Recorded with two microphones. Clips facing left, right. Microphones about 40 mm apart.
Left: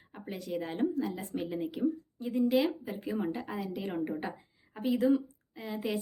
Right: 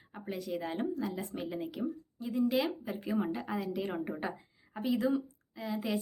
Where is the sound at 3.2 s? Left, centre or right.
Centre.